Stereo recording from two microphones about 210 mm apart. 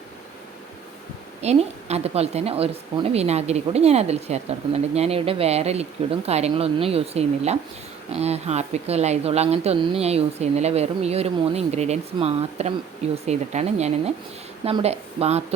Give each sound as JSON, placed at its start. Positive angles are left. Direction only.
{"t": 1.4, "sound": "a woman's voice", "side_deg": -30}